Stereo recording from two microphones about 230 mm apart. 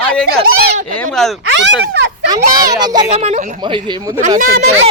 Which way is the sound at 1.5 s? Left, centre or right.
Right.